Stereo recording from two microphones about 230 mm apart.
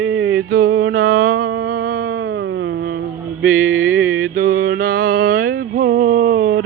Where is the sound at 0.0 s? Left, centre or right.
Right.